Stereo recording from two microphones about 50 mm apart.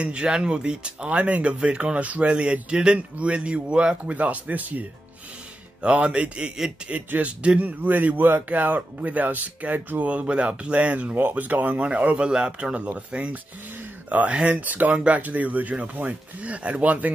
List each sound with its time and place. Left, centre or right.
0.0 s speech: centre
7.1 s speech: right
7.8 s speech: right